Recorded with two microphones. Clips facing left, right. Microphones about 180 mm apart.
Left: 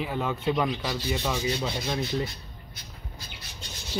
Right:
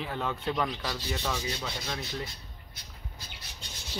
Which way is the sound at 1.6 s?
25° left (ahead or behind).